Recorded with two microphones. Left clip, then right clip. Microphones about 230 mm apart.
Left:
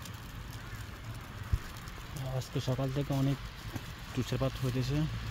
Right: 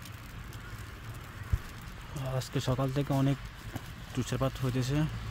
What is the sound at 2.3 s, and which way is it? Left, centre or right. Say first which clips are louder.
Speech: right 3 dB; right.